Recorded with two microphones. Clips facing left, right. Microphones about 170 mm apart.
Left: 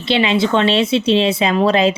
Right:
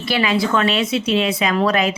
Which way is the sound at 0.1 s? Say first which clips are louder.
Left 3 dB; 25° left (ahead or behind).